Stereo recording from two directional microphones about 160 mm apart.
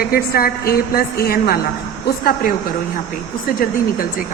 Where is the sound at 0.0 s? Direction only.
70° left (ahead or behind).